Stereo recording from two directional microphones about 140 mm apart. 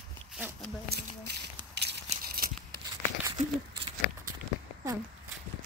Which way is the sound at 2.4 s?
90° right.